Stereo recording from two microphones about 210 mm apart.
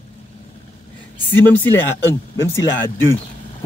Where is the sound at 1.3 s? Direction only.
10° left (ahead or behind).